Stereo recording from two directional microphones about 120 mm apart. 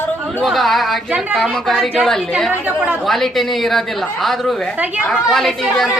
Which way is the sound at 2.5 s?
15° right (ahead or behind).